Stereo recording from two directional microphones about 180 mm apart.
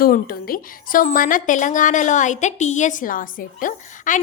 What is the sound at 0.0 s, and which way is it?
A woman's voice, 55° left (ahead or behind).